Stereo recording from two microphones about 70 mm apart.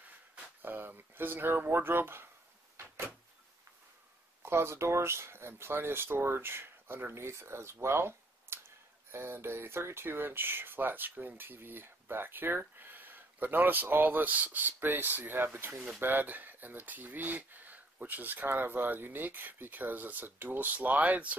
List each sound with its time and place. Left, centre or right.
0.6 s speech: right
2.8 s door: right
4.5 s speech: right